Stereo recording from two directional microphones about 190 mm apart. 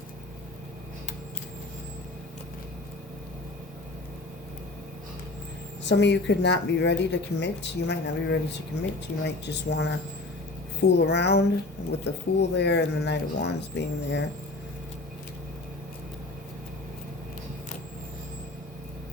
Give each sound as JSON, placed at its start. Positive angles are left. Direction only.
{"t": 5.8, "sound": "speech", "side_deg": 65}